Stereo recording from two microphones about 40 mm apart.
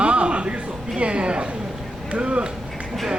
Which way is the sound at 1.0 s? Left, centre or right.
Right.